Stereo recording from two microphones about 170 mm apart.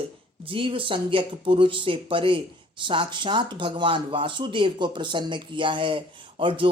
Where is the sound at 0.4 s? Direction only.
30° right (ahead or behind).